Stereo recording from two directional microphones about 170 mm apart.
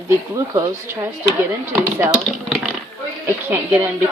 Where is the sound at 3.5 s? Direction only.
15° right (ahead or behind).